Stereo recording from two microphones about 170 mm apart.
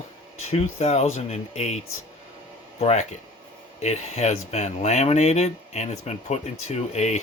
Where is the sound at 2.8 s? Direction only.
40° left (ahead or behind).